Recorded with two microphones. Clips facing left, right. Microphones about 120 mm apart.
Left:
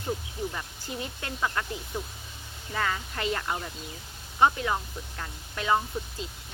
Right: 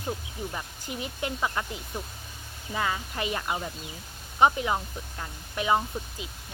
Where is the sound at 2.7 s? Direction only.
15° right (ahead or behind).